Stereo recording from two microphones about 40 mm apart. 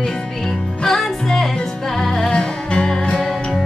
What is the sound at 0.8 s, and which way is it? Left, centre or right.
Music, centre.